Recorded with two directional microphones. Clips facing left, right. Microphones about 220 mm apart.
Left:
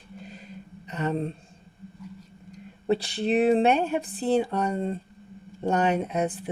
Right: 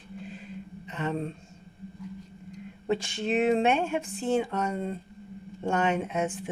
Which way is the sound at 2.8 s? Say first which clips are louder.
Left 4 dB; 35° left (ahead or behind).